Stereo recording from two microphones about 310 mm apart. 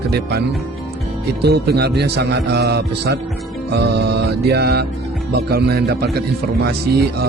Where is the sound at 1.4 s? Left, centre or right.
Right.